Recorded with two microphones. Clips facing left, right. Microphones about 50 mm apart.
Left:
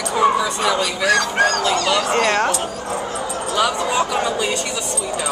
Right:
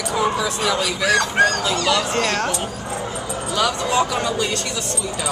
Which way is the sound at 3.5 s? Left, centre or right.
Centre.